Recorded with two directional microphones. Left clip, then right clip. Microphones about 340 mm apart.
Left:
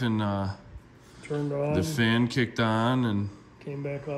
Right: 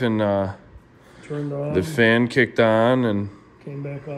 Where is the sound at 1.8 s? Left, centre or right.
Centre.